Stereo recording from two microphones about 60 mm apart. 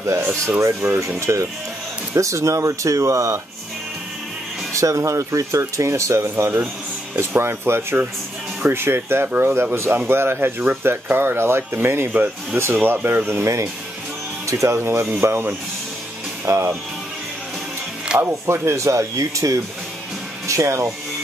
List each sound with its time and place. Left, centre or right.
0.0 s speech: right
0.8 s speech: centre
1.2 s speech: right
4.7 s speech: right
18.1 s speech: centre
18.5 s speech: right
20.4 s speech: right